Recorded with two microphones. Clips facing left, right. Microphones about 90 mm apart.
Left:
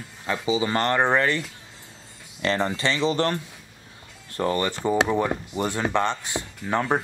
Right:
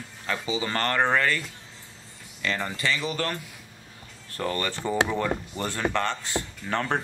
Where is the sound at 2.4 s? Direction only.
30° left (ahead or behind).